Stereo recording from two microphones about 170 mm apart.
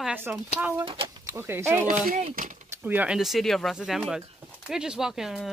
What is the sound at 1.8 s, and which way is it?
Speech, 50° right (ahead or behind).